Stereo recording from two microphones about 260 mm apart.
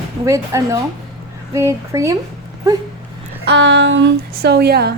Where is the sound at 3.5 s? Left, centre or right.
Right.